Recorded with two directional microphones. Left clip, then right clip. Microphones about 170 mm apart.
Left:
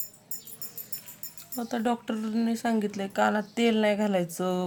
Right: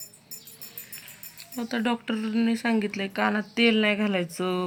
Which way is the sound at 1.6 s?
15° left (ahead or behind).